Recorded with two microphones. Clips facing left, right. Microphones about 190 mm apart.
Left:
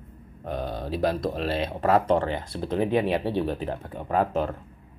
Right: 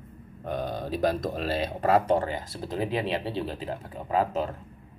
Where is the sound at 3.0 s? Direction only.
60° left (ahead or behind).